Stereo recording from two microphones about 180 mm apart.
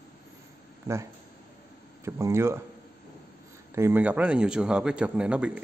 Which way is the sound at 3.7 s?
10° right (ahead or behind).